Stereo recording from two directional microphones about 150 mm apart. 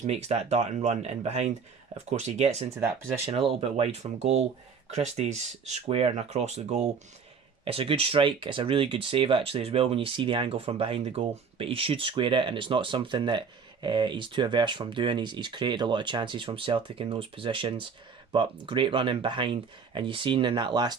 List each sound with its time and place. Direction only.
0.0 s speech: 50° right (ahead or behind); by 20.9 s 30° right (ahead or behind)